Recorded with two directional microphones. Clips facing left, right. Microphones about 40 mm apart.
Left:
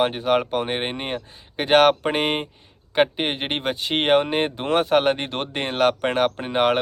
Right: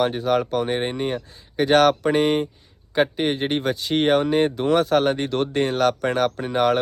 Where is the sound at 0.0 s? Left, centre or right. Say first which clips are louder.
Even; left.